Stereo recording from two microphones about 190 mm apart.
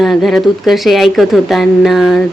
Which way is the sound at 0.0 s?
Centre (ahead or behind).